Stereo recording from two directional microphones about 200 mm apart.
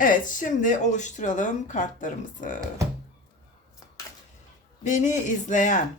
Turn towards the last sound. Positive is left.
turn(degrees=40)  # may be behind; listen again after turning